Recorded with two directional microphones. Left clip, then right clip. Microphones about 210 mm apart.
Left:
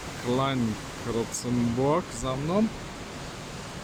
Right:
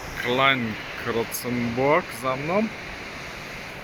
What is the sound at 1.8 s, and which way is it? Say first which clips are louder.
Speech: right 7 dB; 5° right (ahead or behind).